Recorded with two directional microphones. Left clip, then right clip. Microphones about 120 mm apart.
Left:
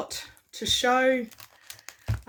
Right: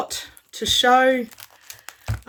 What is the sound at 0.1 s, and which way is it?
Speech, 35° right (ahead or behind).